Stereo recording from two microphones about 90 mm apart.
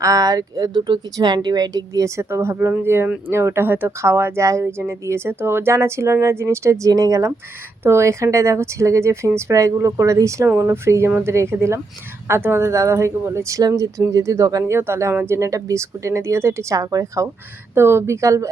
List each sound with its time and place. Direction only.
0.0 s speech: 40° right (ahead or behind)